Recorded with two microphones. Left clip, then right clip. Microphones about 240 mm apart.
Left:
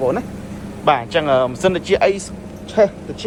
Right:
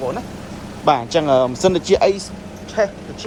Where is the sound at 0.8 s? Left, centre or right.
Right.